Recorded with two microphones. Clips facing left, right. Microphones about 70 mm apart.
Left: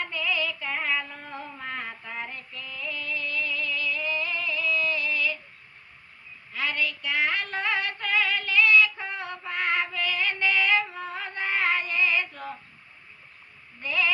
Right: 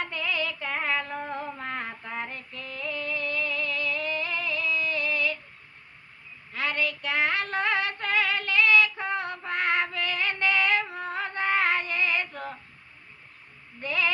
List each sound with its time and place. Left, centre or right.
0.0 s female singing: right
0.9 s a sound: right
1.2 s music: right
4.7 s music: right
4.9 s female singing: right
6.5 s child singing: right
7.3 s synthetic singing: right
9.9 s music: right
11.7 s female singing: right
13.8 s female singing: right